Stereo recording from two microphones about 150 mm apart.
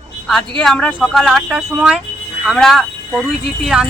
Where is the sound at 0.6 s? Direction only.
5° left (ahead or behind).